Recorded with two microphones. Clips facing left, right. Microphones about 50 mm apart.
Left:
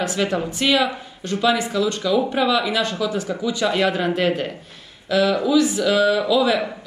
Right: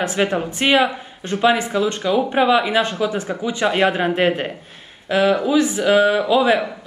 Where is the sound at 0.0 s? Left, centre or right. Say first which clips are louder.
Right 2 dB; right.